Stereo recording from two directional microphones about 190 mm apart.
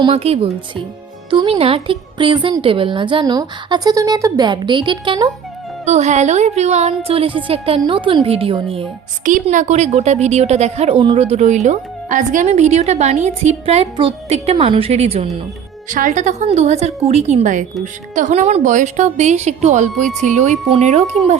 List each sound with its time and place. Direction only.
0.0 s a woman's voice: 30° right (ahead or behind)
5.8 s a woman's voice: 35° right (ahead or behind)
9.2 s a woman's voice: 40° right (ahead or behind)
15.9 s a woman's voice: 45° right (ahead or behind)